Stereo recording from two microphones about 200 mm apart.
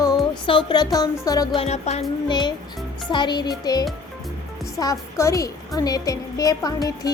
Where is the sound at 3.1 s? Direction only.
20° left (ahead or behind).